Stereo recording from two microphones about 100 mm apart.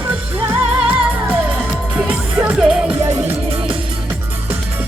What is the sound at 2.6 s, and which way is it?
Music, 10° right (ahead or behind).